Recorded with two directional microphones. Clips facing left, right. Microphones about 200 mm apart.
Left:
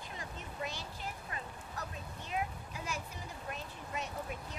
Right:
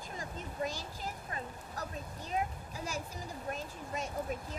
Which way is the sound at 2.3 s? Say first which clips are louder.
Right 2 dB; 35° right (ahead or behind).